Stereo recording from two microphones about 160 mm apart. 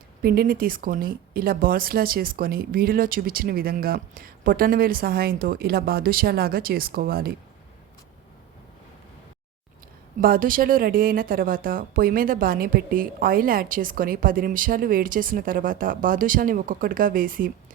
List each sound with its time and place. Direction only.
0.2 s speech: 70° right (ahead or behind)
10.2 s speech: 65° right (ahead or behind)